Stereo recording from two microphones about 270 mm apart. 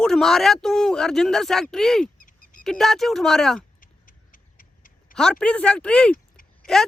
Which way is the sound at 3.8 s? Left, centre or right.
Left.